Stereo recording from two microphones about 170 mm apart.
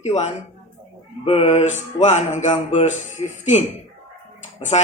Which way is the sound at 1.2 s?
35° left (ahead or behind).